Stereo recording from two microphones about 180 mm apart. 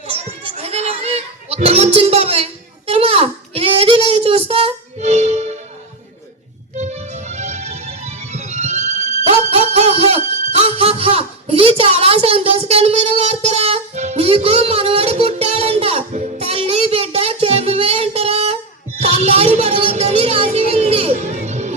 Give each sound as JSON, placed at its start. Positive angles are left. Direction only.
{"t": 0.1, "sound": "children playing", "side_deg": -35}
{"t": 6.7, "sound": "music", "side_deg": -40}
{"t": 19.0, "sound": "a sound", "side_deg": -35}